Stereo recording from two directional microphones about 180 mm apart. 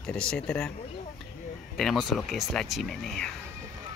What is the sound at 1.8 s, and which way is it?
Speech, centre (ahead or behind).